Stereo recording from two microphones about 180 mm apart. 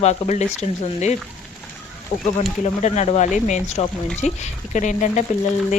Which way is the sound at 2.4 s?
40° left (ahead or behind).